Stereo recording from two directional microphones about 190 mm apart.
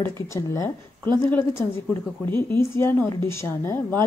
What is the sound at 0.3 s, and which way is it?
A woman's voice, 15° left (ahead or behind).